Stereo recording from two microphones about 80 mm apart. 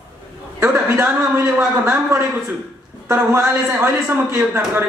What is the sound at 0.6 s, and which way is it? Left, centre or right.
Speech, right.